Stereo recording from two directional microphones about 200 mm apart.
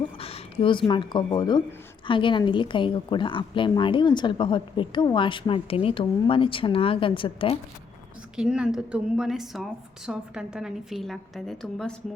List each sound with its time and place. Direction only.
0.2 s a woman's voice: 30° left (ahead or behind)
8.4 s a woman's voice: 5° right (ahead or behind)